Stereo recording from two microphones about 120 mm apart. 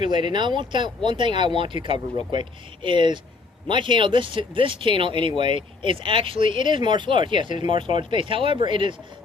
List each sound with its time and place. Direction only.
0.0 s speech: 40° right (ahead or behind)